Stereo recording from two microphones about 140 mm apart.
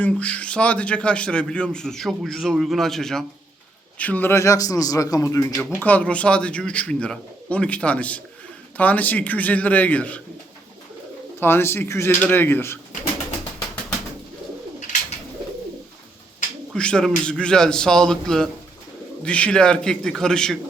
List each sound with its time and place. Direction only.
0.0 s a man's voice: 10° left (ahead or behind)
5.8 s a man's voice: 10° left (ahead or behind)
11.3 s a man's voice: 15° left (ahead or behind)
16.7 s a man's voice: 5° left (ahead or behind)